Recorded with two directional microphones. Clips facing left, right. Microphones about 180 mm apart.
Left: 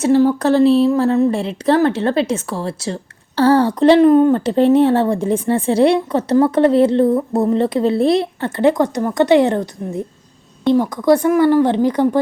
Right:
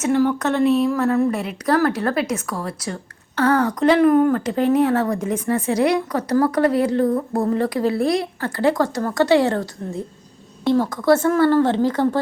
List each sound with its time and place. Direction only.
0.0 s a woman's voice: 30° left (ahead or behind); by 12.2 s 15° left (ahead or behind)